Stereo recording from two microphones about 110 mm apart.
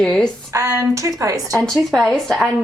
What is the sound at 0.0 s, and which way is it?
Speech, 5° left (ahead or behind).